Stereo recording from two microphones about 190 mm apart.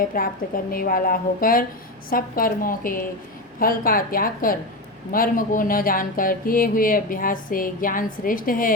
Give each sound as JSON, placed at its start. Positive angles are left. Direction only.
{"t": 0.0, "sound": "speech", "side_deg": 50}